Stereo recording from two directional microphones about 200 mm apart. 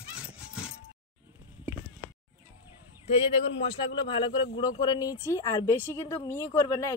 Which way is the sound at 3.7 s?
25° left (ahead or behind).